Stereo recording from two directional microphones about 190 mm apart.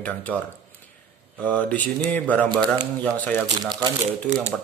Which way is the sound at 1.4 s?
10° left (ahead or behind).